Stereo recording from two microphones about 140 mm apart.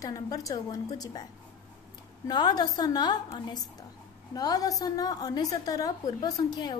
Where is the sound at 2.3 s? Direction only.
30° left (ahead or behind).